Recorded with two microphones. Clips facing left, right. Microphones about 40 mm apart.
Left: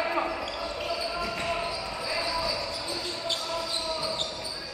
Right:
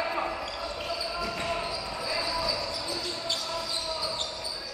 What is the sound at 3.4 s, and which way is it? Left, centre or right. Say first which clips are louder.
Basketball bounce: left 2 dB; centre.